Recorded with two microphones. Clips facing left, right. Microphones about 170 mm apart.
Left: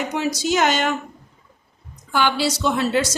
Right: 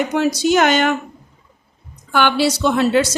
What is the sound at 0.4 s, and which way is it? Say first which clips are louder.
Speech: right 4 dB; 60° right (ahead or behind).